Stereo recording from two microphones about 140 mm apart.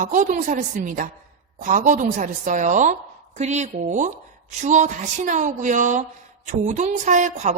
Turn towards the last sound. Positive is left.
turn(degrees=-60)  # may be behind; listen again after turning